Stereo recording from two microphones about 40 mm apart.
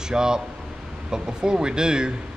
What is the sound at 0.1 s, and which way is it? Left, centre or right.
Speech, centre.